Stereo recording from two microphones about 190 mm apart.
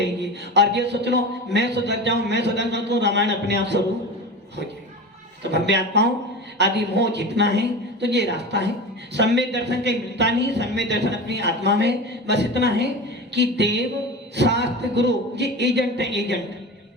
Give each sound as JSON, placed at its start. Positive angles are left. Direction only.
{"t": 0.0, "sound": "a man's voice", "side_deg": -65}
{"t": 5.4, "sound": "a man's voice", "side_deg": -65}